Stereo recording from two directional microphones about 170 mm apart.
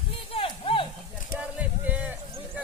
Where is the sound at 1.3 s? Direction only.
10° right (ahead or behind).